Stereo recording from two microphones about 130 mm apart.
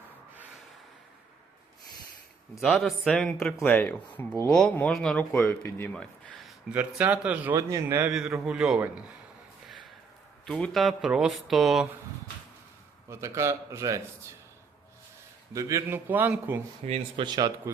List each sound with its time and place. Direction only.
2.6 s speech: centre (ahead or behind)
3.6 s a man's voice: 15° left (ahead or behind)
6.7 s a man's voice: 10° right (ahead or behind)
7.5 s a man's voice: 25° right (ahead or behind)
8.0 s speech: 5° right (ahead or behind)
10.4 s speech: 5° left (ahead or behind)
13.1 s a man's voice: 20° right (ahead or behind)
15.5 s a man's voice: 20° right (ahead or behind)
16.8 s speech: 55° right (ahead or behind)
17.2 s speech: 30° right (ahead or behind)